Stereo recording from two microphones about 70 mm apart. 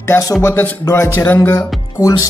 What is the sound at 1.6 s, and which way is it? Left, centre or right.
Speech, left.